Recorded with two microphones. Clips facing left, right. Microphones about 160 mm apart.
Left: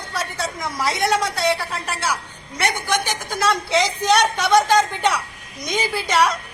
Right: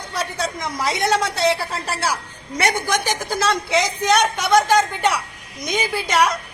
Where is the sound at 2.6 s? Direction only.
40° right (ahead or behind).